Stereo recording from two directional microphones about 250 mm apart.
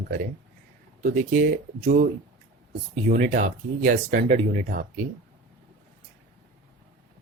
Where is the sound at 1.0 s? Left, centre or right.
Right.